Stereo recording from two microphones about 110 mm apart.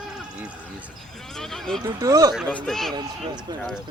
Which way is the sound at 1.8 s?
35° right (ahead or behind).